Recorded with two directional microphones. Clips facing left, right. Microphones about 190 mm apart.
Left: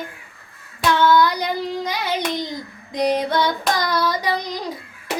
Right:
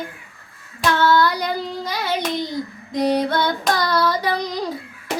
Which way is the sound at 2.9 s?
15° left (ahead or behind).